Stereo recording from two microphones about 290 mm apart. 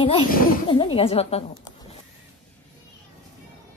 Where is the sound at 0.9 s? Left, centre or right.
Left.